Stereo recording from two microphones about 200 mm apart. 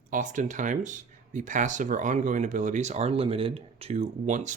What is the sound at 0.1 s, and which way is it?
Speech, 40° right (ahead or behind).